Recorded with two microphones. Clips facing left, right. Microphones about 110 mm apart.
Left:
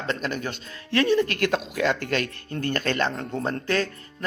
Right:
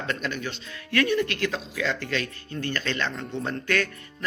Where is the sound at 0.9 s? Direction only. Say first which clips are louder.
Left 3 dB; 30° left (ahead or behind).